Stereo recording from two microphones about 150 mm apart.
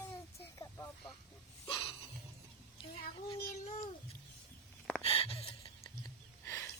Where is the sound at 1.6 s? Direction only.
35° left (ahead or behind).